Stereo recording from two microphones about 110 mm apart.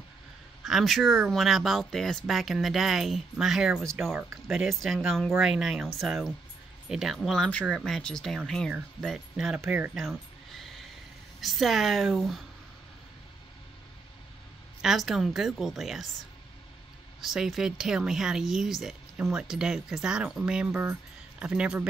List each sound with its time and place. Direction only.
0.7 s speech: centre (ahead or behind)
9.6 s speech: 15° right (ahead or behind)
9.9 s a sound: centre (ahead or behind)
11.4 s speech: centre (ahead or behind)
14.8 s speech: 5° right (ahead or behind)
17.2 s speech: centre (ahead or behind)